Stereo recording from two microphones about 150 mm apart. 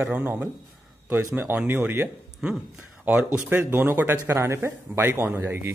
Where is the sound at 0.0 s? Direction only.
10° right (ahead or behind).